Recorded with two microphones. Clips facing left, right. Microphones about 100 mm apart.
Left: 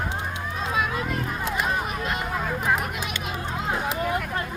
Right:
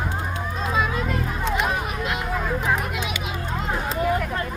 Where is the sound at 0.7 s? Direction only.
5° left (ahead or behind).